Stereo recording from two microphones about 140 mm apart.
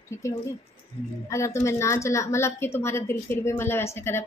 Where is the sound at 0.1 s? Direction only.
20° left (ahead or behind).